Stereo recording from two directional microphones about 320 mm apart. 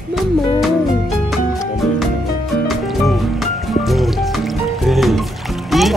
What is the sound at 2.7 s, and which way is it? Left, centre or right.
Music, centre.